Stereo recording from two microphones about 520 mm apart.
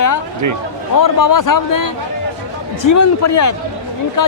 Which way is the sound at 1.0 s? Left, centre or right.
Left.